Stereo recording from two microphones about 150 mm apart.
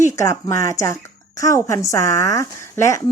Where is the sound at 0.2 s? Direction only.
20° left (ahead or behind).